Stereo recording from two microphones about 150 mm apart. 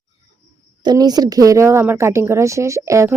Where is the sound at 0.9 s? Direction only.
25° right (ahead or behind).